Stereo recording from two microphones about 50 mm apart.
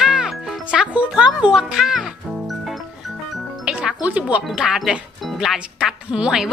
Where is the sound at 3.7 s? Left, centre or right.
Centre.